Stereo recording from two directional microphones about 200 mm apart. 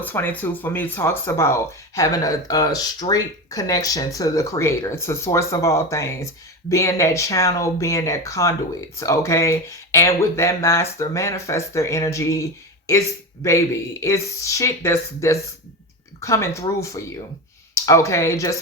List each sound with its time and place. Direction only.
0.0 s speech: 10° left (ahead or behind)